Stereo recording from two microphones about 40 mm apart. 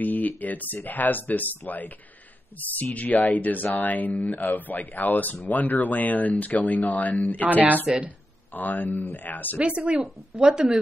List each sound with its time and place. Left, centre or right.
0.0 s speech: left
7.4 s speech: right
8.5 s speech: left
9.6 s speech: right
10.5 s a woman's voice: right